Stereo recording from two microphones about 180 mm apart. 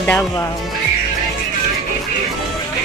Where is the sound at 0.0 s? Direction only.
10° left (ahead or behind).